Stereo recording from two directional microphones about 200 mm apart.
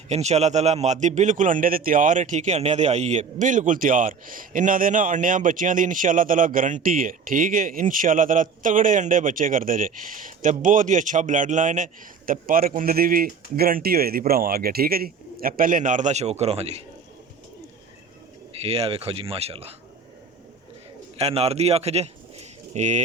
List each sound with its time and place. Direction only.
0.1 s a man's voice: 35° right (ahead or behind)
18.6 s speech: 30° right (ahead or behind)
21.2 s speech: 30° right (ahead or behind)